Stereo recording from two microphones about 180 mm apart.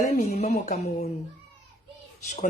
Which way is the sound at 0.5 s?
60° left (ahead or behind).